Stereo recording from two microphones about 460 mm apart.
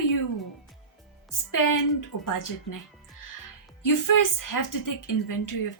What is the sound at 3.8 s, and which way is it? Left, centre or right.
A woman's voice, left.